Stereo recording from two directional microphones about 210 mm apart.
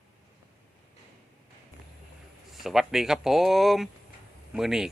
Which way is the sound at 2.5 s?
Centre (ahead or behind).